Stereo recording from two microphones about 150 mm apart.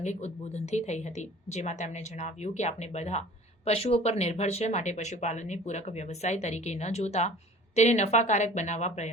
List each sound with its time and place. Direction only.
0.0 s speech: 50° left (ahead or behind)